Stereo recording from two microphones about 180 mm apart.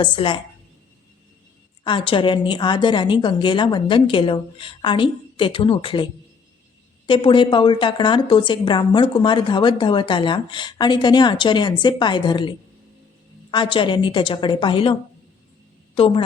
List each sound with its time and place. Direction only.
0.0 s a woman's voice: 25° left (ahead or behind)
1.8 s a woman's voice: 30° left (ahead or behind)
7.1 s a woman's voice: 25° left (ahead or behind)
16.0 s a woman's voice: 30° left (ahead or behind)